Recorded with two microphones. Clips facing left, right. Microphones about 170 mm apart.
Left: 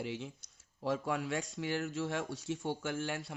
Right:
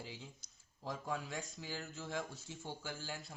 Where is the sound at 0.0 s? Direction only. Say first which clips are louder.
Left 10 dB; 75° left (ahead or behind).